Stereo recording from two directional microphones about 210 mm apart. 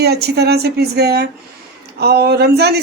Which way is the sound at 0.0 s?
50° right (ahead or behind).